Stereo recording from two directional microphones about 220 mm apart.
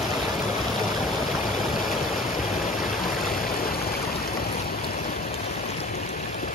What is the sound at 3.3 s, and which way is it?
Stream, 40° left (ahead or behind).